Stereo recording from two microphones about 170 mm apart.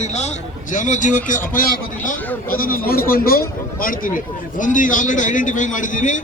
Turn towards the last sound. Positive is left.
turn(degrees=50)  # may be behind; listen again after turning